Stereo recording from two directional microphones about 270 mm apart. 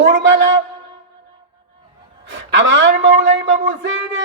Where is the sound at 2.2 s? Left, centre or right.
Right.